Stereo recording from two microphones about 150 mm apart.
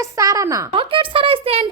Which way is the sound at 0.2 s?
20° right (ahead or behind).